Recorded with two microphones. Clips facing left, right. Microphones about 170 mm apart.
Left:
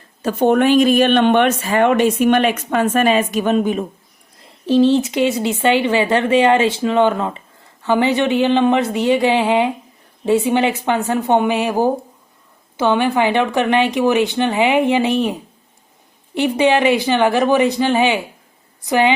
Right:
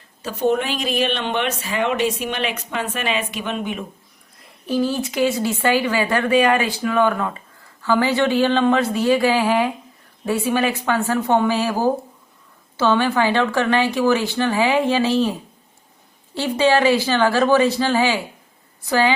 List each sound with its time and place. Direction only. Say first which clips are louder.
0.2 s speech: left 6 dB; 55° left (ahead or behind); by 3.8 s 40° left (ahead or behind)
4.6 s speech: left 8 dB; 25° left (ahead or behind)